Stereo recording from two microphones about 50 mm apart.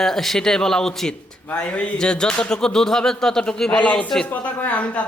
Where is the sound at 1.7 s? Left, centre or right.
Left.